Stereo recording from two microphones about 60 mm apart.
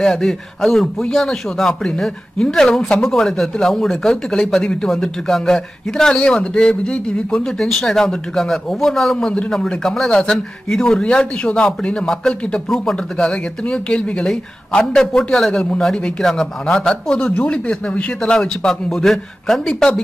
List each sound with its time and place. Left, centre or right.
0.0 s speech: centre